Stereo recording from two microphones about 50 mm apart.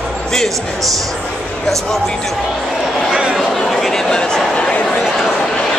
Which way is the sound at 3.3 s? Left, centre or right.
Centre.